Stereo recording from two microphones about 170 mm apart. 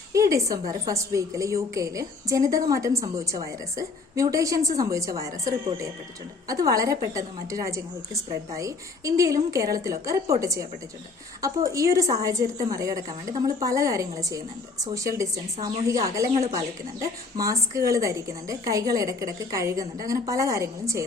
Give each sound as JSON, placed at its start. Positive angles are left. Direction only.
{"t": 0.1, "sound": "a woman's voice", "side_deg": -20}